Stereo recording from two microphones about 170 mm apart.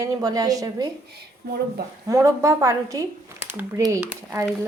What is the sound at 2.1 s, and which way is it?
A woman's voice, 20° right (ahead or behind).